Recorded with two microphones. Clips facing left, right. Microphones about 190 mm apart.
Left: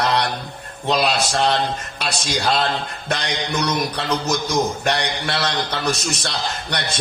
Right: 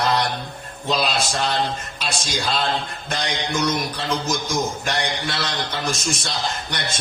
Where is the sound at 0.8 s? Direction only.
65° left (ahead or behind).